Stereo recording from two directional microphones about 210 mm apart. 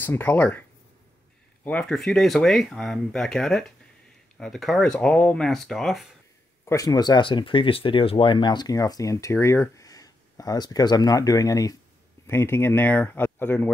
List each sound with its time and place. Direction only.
0.0 s speech: 10° left (ahead or behind)
6.6 s speech: 15° left (ahead or behind)